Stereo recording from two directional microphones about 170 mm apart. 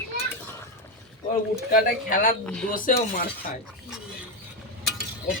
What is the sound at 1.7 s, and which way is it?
Speech, 55° left (ahead or behind).